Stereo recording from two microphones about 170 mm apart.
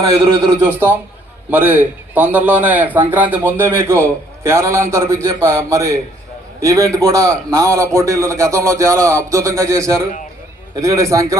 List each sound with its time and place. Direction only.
0.6 s a man's voice: 10° right (ahead or behind)